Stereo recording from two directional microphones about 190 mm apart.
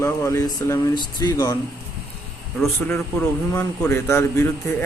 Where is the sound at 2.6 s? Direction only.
10° left (ahead or behind).